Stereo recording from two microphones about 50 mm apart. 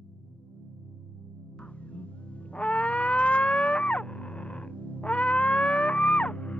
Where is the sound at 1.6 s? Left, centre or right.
Left.